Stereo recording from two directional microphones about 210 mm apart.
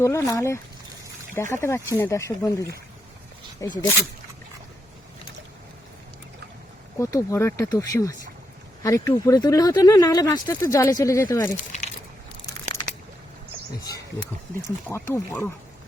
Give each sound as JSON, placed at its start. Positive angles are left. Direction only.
{"t": 0.0, "sound": "speech", "side_deg": 15}
{"t": 7.0, "sound": "speech", "side_deg": 15}
{"t": 11.5, "sound": "speech", "side_deg": 35}
{"t": 13.8, "sound": "speech", "side_deg": 20}